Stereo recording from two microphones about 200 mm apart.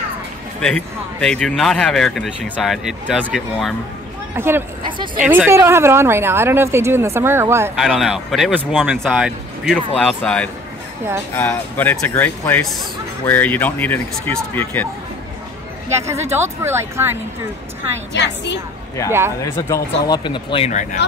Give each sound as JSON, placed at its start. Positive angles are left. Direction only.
{"t": 0.6, "sound": "speech", "side_deg": 5}
{"t": 4.4, "sound": "speech", "side_deg": -10}
{"t": 4.8, "sound": "speech", "side_deg": -25}
{"t": 5.2, "sound": "speech", "side_deg": -10}
{"t": 7.7, "sound": "speech", "side_deg": 0}
{"t": 15.9, "sound": "speech", "side_deg": -15}
{"t": 18.1, "sound": "a woman's voice", "side_deg": 60}
{"t": 19.4, "sound": "speech", "side_deg": 20}